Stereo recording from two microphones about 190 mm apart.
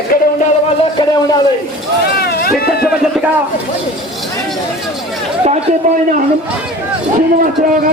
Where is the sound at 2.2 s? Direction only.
55° left (ahead or behind).